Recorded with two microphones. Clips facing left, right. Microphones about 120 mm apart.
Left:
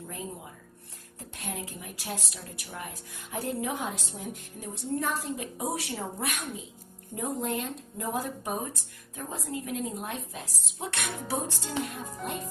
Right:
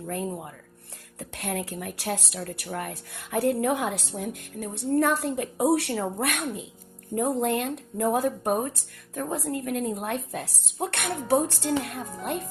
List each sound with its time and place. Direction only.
0.1 s speech: 60° right (ahead or behind)